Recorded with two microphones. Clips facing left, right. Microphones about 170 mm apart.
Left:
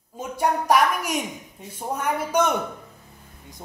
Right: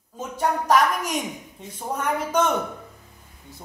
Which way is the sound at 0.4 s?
10° left (ahead or behind).